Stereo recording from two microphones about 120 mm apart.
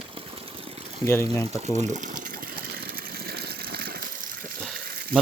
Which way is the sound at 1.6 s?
70° right (ahead or behind).